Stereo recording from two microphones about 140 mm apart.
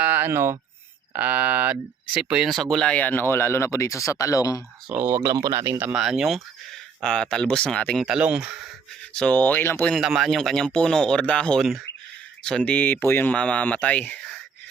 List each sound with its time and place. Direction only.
0.0 s a sound: 15° right (ahead or behind)
1.1 s speech: 10° right (ahead or behind); by 4.6 s 25° left (ahead or behind)
5.0 s speech: 25° right (ahead or behind)
6.0 s speech: 5° right (ahead or behind)
8.0 s speech: 5° right (ahead or behind)
9.0 s speech: 10° left (ahead or behind)
9.9 s speech: centre (ahead or behind)